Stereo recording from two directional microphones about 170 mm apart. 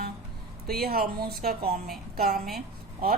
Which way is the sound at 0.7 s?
60° right (ahead or behind).